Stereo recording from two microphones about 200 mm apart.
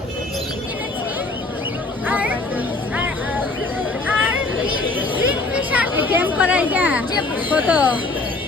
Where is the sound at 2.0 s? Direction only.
10° right (ahead or behind).